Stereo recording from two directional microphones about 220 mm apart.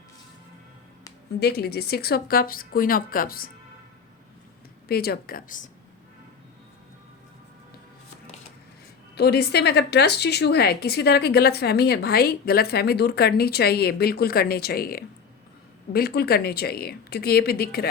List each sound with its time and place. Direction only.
1.4 s speech: 45° left (ahead or behind)
4.9 s speech: 45° left (ahead or behind)
9.1 s speech: 45° left (ahead or behind)